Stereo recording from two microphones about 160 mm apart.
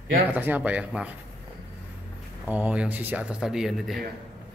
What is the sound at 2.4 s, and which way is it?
A man's voice, 10° right (ahead or behind).